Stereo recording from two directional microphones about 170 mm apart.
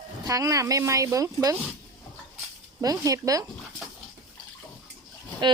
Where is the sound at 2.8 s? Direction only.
20° right (ahead or behind).